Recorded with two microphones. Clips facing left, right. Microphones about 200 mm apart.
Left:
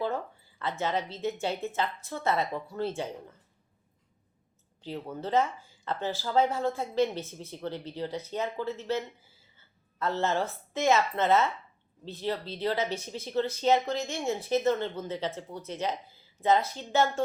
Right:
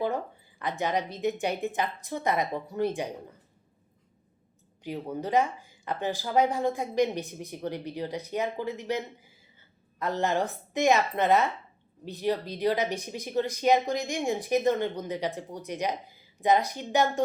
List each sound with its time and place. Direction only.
0.6 s speech: 15° right (ahead or behind)
4.8 s speech: 15° right (ahead or behind)